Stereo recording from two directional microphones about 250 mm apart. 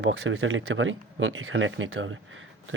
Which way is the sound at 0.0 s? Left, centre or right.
Right.